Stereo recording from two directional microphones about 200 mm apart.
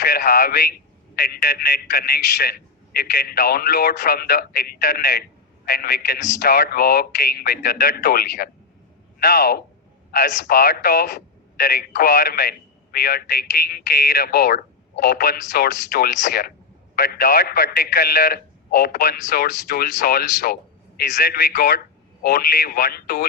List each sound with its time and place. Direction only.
0.0 s speech: 50° left (ahead or behind)